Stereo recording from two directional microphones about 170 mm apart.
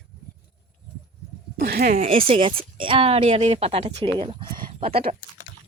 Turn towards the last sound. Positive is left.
turn(degrees=-30)  # may be behind; listen again after turning